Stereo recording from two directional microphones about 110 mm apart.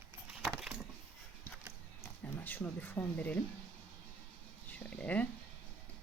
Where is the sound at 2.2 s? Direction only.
15° left (ahead or behind).